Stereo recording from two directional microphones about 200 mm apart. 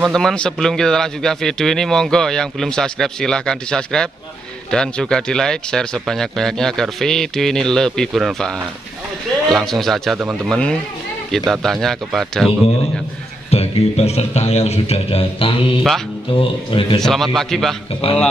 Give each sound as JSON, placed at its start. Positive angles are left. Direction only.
{"t": 0.0, "sound": "speech", "side_deg": 0}
{"t": 13.5, "sound": "a man's voice", "side_deg": 30}
{"t": 17.0, "sound": "speech", "side_deg": 0}